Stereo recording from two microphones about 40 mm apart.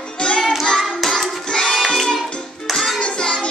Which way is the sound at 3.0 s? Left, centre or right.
Left.